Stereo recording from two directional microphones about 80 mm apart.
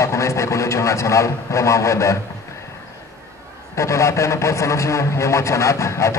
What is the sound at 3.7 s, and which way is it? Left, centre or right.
A man's voice, left.